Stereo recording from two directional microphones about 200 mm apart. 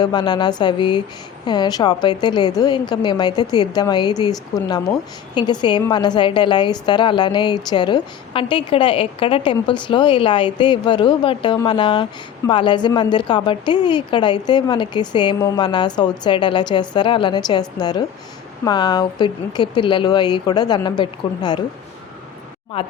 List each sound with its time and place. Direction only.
0.0 s a woman's voice: 20° left (ahead or behind)
22.7 s a woman's voice: 30° left (ahead or behind)